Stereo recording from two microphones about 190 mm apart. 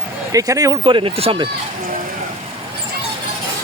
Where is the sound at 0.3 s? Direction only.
15° right (ahead or behind).